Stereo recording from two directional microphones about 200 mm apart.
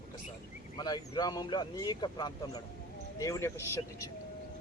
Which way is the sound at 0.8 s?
20° left (ahead or behind).